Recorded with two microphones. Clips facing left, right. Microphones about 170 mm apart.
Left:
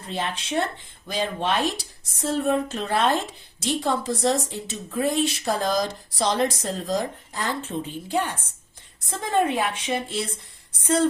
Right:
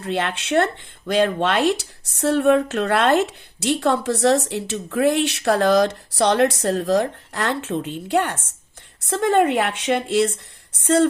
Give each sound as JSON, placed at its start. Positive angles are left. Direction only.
{"t": 0.0, "sound": "speech", "side_deg": -70}